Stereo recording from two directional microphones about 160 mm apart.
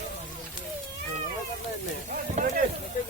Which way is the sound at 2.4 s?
50° right (ahead or behind).